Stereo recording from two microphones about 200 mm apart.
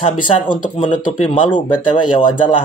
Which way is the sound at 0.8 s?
40° left (ahead or behind).